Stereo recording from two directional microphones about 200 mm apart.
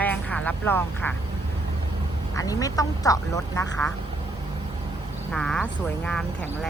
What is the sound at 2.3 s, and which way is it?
Speech, 15° left (ahead or behind).